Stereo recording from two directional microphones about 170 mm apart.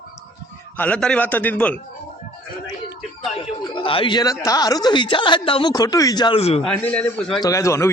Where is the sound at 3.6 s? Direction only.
30° left (ahead or behind).